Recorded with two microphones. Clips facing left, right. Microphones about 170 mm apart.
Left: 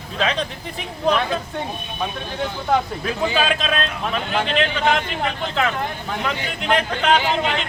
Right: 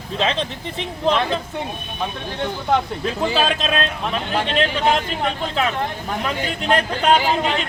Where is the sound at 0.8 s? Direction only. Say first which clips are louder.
Even; 20° right (ahead or behind).